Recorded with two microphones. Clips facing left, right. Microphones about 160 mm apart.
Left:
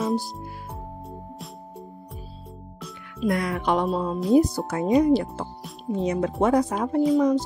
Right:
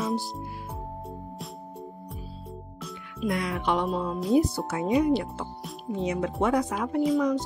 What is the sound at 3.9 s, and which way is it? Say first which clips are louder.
Speech: left 3 dB; 30° left (ahead or behind).